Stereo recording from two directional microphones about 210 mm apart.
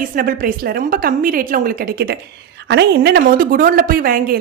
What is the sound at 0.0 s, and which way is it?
A woman's voice, 40° right (ahead or behind).